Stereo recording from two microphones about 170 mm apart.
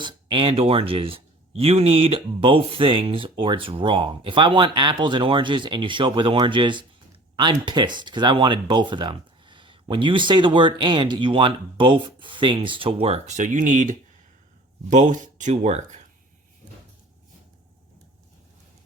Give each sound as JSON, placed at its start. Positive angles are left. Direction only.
{"t": 0.0, "sound": "speech", "side_deg": -30}